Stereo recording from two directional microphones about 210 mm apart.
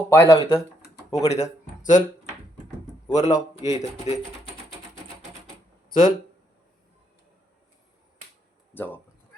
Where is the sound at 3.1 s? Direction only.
30° left (ahead or behind).